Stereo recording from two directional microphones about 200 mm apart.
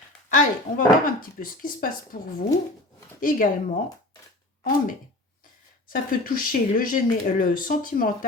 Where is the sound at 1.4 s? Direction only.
45° left (ahead or behind).